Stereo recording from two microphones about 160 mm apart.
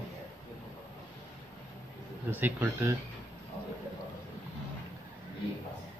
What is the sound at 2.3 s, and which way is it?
Speech, 10° right (ahead or behind).